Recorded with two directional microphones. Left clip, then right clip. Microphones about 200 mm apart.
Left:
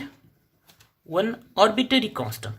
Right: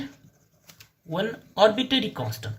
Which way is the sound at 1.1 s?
45° left (ahead or behind).